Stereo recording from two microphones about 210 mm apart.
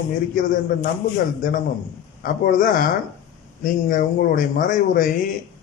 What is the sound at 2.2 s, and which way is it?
A man's voice, 40° left (ahead or behind).